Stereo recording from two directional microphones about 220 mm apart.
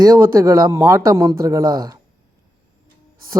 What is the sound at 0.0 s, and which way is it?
Speech, 15° right (ahead or behind).